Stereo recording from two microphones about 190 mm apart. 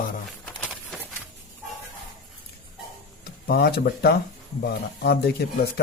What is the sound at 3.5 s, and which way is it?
Speech, 55° left (ahead or behind).